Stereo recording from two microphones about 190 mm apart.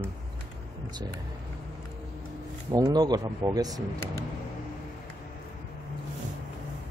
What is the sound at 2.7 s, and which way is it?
Speech, 20° right (ahead or behind).